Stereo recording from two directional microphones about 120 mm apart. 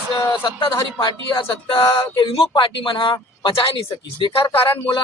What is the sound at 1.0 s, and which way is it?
Speech, 40° left (ahead or behind).